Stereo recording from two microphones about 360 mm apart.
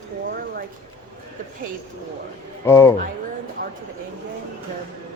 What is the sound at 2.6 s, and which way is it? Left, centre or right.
Speech, centre.